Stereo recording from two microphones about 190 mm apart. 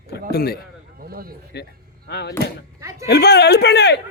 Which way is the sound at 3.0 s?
60° left (ahead or behind).